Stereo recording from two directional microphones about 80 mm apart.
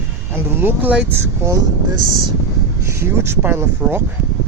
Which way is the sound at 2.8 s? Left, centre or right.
Right.